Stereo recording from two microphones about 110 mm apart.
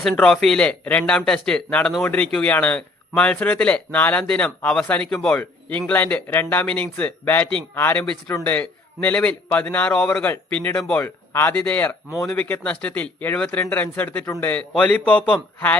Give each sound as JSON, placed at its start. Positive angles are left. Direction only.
{"t": 0.0, "sound": "speech", "side_deg": 5}
{"t": 11.0, "sound": "speech", "side_deg": 20}
{"t": 12.1, "sound": "speech", "side_deg": 5}